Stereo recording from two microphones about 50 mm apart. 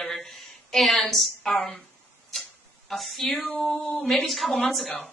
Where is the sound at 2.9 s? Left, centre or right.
Centre.